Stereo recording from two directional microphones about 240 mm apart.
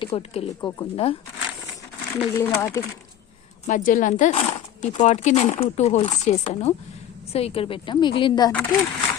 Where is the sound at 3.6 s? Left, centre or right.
Left.